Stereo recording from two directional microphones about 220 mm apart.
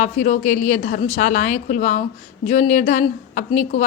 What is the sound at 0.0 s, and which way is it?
A woman's voice, 35° left (ahead or behind).